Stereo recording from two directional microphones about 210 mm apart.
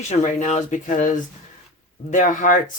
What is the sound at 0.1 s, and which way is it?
Speech, 35° left (ahead or behind).